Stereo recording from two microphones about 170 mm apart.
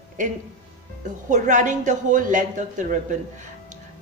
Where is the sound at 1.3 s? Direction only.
45° right (ahead or behind).